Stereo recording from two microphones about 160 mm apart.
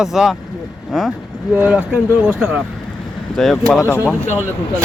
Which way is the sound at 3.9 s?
10° right (ahead or behind).